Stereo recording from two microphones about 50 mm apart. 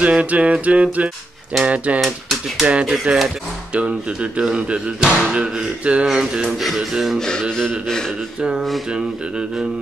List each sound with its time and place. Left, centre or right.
0.0 s speech: right
6.6 s music: centre
6.9 s speech: centre
7.2 s a sound: centre
8.4 s speech: centre